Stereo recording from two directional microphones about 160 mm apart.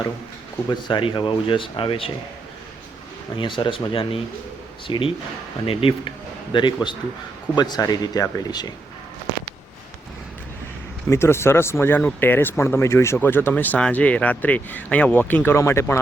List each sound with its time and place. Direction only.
0.7 s speech: 30° left (ahead or behind)
3.3 s speech: 30° left (ahead or behind)
11.1 s speech: 15° left (ahead or behind)